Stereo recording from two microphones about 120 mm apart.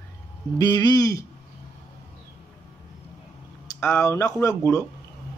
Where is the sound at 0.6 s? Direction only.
35° left (ahead or behind).